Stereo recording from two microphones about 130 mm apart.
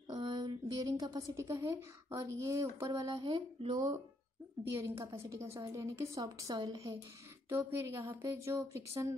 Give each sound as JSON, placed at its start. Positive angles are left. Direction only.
{"t": 0.1, "sound": "a woman's voice", "side_deg": -35}
{"t": 4.6, "sound": "a woman's voice", "side_deg": -20}
{"t": 7.4, "sound": "a woman's voice", "side_deg": -20}